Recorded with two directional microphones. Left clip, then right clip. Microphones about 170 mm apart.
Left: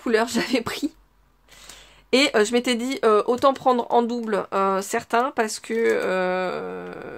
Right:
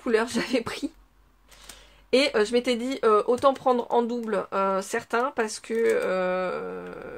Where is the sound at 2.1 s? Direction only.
40° left (ahead or behind).